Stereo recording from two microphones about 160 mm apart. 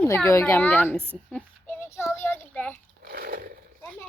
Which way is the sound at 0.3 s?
15° left (ahead or behind).